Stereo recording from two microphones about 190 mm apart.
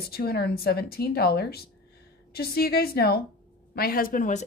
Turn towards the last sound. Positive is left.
turn(degrees=40)  # may be behind; listen again after turning